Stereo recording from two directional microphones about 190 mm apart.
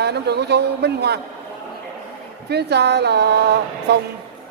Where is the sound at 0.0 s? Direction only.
60° right (ahead or behind).